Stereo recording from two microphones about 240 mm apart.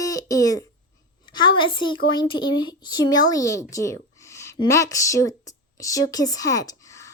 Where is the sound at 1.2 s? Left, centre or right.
Centre.